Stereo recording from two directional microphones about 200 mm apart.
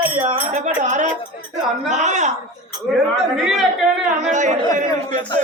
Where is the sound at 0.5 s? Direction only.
35° right (ahead or behind).